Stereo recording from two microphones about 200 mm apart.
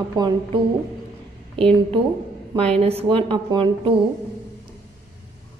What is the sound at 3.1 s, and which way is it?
Speech, 25° right (ahead or behind).